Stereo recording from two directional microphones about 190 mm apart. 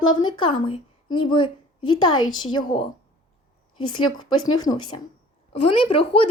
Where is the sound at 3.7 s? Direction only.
25° left (ahead or behind).